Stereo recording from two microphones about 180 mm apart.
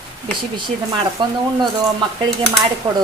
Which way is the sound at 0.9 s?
25° right (ahead or behind).